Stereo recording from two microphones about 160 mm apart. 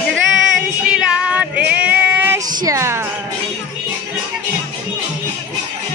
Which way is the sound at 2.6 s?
15° right (ahead or behind).